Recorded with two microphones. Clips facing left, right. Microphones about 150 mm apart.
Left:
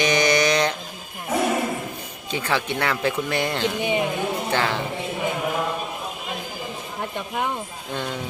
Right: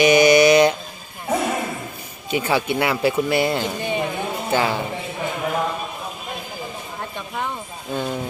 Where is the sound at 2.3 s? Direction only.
10° right (ahead or behind).